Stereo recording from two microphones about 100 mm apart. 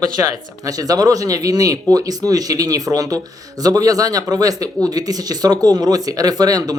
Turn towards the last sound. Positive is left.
turn(degrees=-40)  # may be behind; listen again after turning